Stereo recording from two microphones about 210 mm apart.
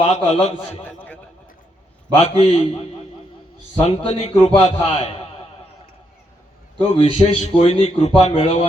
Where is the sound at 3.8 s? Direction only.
25° left (ahead or behind).